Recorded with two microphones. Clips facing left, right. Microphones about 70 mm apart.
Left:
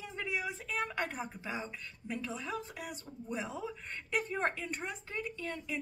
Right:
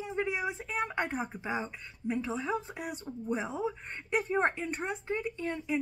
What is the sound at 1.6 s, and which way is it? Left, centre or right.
Speech, right.